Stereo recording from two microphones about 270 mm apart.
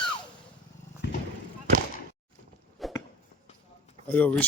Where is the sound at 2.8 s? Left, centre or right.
Centre.